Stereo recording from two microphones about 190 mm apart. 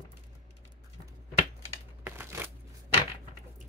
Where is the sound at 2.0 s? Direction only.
10° right (ahead or behind).